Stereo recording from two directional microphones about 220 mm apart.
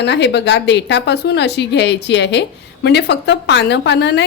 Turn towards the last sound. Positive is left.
turn(degrees=50)  # may be behind; listen again after turning